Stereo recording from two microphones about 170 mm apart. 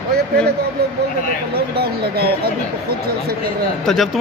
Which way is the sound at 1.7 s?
65° right (ahead or behind).